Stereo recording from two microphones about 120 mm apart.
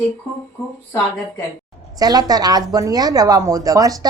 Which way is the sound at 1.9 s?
35° right (ahead or behind).